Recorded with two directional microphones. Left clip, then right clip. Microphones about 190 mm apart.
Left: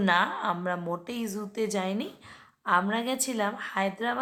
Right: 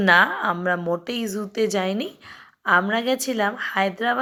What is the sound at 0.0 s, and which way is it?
Speech, 25° right (ahead or behind).